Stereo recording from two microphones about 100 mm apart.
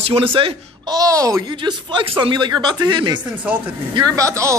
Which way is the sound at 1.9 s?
55° right (ahead or behind).